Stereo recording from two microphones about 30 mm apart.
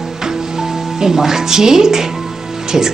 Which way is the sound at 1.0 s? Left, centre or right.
Centre.